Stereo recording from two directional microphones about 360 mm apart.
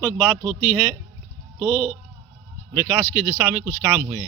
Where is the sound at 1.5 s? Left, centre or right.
Centre.